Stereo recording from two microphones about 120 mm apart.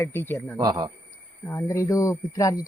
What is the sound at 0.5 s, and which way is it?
Speech, 30° right (ahead or behind).